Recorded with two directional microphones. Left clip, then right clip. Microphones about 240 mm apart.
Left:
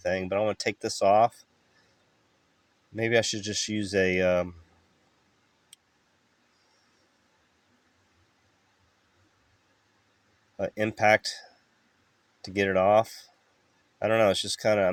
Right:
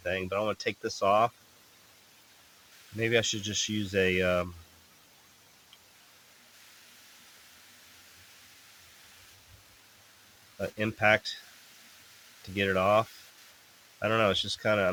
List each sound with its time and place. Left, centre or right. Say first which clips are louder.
0.0 s speech: left 4 dB; centre
2.9 s speech: left 2 dB; centre
10.6 s speech: left 3 dB; centre
12.4 s speech: left 4 dB; left